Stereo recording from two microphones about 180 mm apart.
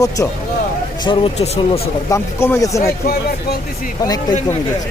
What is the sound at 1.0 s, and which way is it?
Speech, 30° left (ahead or behind).